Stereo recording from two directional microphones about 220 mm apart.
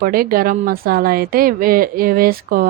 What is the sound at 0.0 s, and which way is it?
Speech, 40° right (ahead or behind).